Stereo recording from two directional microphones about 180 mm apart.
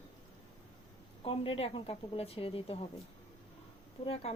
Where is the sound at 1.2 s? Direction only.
30° left (ahead or behind).